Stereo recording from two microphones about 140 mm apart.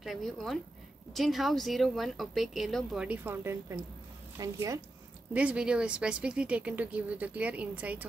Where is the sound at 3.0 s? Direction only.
15° right (ahead or behind).